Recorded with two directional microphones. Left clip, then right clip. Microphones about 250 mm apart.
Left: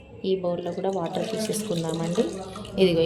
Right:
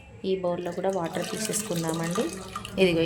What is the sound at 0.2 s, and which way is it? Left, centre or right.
Speech, right.